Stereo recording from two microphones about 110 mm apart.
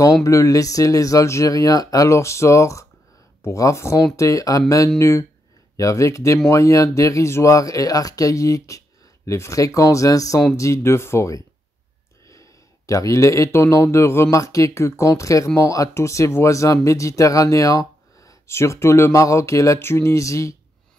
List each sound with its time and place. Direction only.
0.0 s speech: 30° left (ahead or behind)
12.3 s a sound: 30° left (ahead or behind)
13.9 s speech: 25° left (ahead or behind)